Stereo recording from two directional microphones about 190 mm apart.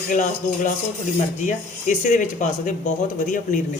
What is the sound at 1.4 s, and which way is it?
Speech, 40° left (ahead or behind).